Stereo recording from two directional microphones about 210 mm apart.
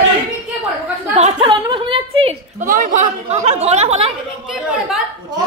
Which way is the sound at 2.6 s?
40° right (ahead or behind).